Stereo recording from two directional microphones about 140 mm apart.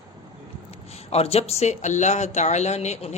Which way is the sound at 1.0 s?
45° left (ahead or behind).